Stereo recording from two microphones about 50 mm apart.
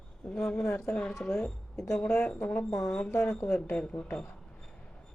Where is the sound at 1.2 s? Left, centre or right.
Centre.